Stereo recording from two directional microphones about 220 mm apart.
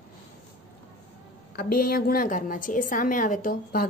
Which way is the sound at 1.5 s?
45° left (ahead or behind).